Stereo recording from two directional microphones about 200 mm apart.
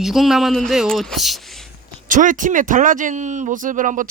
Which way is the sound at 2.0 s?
40° right (ahead or behind).